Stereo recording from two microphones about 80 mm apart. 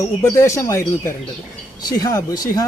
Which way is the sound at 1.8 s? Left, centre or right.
Left.